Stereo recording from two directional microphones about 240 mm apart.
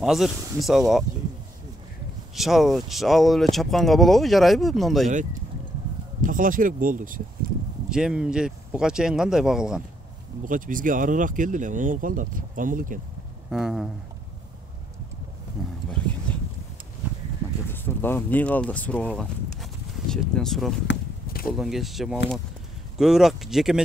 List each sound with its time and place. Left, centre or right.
0.0 s speech: centre
2.3 s speech: centre
6.2 s speech: right
7.9 s speech: centre
10.4 s speech: right
13.5 s speech: centre
15.9 s boat: centre
17.6 s speech: centre
20.8 s a sound: left
21.5 s speech: centre